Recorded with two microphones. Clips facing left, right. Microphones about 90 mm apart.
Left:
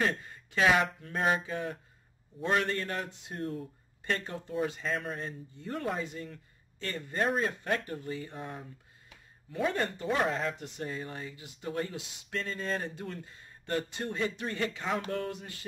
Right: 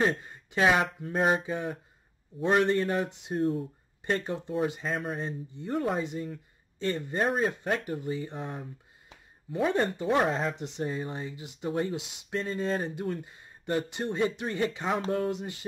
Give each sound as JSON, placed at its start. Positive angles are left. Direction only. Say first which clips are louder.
{"t": 0.0, "sound": "speech", "louder": "right 4 dB", "side_deg": -25}
{"t": 5.9, "sound": "speech", "louder": "right 5 dB", "side_deg": -20}
{"t": 9.7, "sound": "speech", "louder": "right 4 dB", "side_deg": -20}